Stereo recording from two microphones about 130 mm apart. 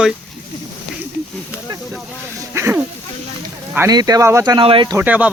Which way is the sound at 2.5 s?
15° right (ahead or behind).